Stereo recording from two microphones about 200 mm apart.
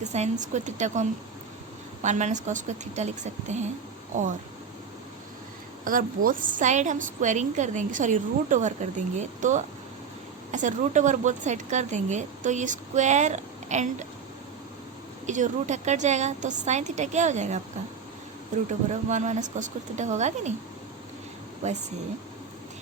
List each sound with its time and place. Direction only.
0.0 s a woman's voice: 35° right (ahead or behind)
5.8 s a woman's voice: 45° right (ahead or behind)
15.3 s a woman's voice: 35° right (ahead or behind)
18.7 s a woman's voice: 35° right (ahead or behind)
21.6 s a woman's voice: 35° right (ahead or behind)